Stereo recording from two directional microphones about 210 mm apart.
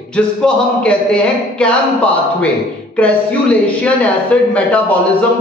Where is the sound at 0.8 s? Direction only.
5° left (ahead or behind).